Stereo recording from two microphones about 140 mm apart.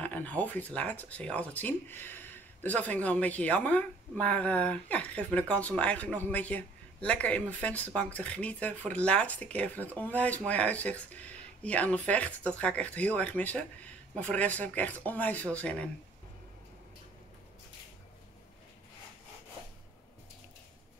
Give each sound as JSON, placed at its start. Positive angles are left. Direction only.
{"t": 0.0, "sound": "speech", "side_deg": 10}